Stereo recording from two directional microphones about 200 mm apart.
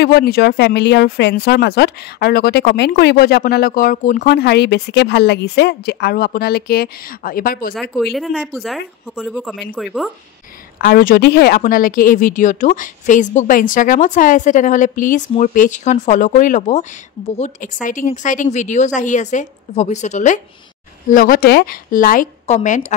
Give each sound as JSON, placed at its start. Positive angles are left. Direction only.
{"t": 0.0, "sound": "speech", "side_deg": 55}
{"t": 7.7, "sound": "speech", "side_deg": 0}
{"t": 10.8, "sound": "a woman's voice", "side_deg": 50}